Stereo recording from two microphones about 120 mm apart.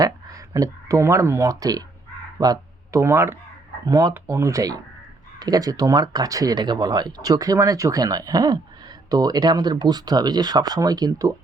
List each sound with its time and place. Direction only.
0.0 s speech: 30° right (ahead or behind)